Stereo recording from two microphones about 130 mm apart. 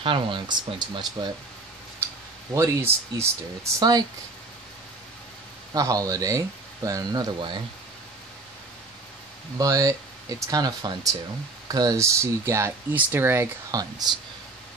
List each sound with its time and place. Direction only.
0.0 s speech: 40° right (ahead or behind)
2.5 s speech: 25° right (ahead or behind)
5.7 s speech: 25° right (ahead or behind)
9.6 s speech: 25° right (ahead or behind)
13.7 s speech: 30° right (ahead or behind)